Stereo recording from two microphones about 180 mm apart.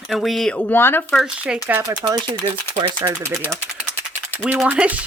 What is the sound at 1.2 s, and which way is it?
Speech, 5° right (ahead or behind).